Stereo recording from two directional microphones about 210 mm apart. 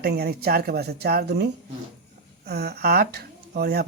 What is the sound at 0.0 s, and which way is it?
Speech, 50° right (ahead or behind).